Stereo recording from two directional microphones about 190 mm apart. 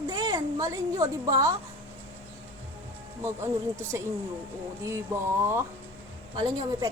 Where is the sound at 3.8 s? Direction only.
15° right (ahead or behind).